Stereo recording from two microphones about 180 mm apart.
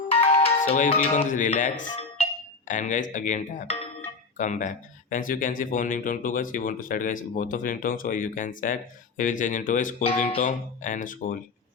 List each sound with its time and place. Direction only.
0.1 s music: 30° left (ahead or behind)
0.9 s speech: 35° left (ahead or behind)
10.0 s speech: 35° left (ahead or behind)